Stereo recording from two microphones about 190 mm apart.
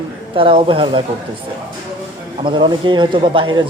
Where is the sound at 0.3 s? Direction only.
25° right (ahead or behind).